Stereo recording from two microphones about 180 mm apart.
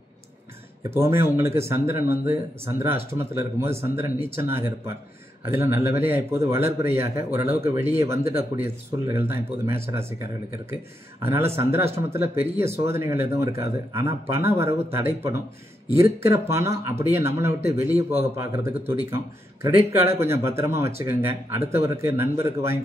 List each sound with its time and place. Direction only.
0.8 s speech: 15° right (ahead or behind)
11.2 s speech: 15° right (ahead or behind)